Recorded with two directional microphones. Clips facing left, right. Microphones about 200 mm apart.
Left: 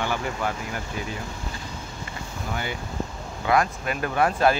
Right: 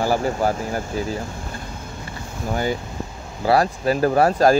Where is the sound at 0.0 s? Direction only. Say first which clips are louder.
Right 7 dB; 35° right (ahead or behind).